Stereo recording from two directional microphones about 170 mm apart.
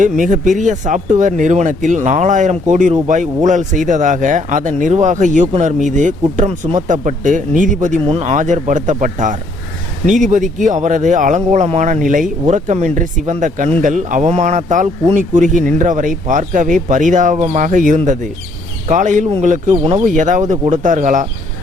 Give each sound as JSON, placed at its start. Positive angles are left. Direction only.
{"t": 0.0, "sound": "speech", "side_deg": -50}
{"t": 17.3, "sound": "speech", "side_deg": -35}
{"t": 17.6, "sound": "speech", "side_deg": -50}